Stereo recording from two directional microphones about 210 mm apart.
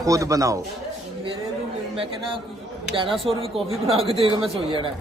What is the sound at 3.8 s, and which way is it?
A man's voice, 25° right (ahead or behind).